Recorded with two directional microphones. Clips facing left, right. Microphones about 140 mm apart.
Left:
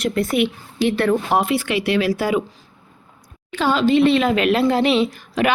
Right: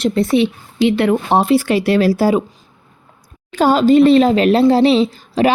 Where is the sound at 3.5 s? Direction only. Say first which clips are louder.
Right 6 dB; 40° right (ahead or behind).